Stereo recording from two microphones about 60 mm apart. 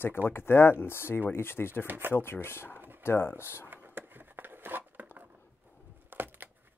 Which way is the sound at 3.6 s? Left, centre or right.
Right.